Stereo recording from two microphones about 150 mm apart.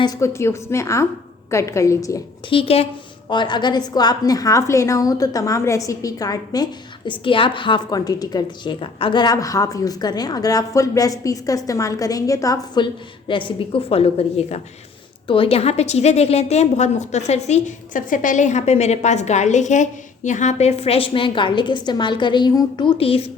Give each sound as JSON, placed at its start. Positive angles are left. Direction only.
{"t": 0.0, "sound": "a woman's voice", "side_deg": 20}
{"t": 2.5, "sound": "a woman's voice", "side_deg": 40}
{"t": 7.1, "sound": "a woman's voice", "side_deg": 35}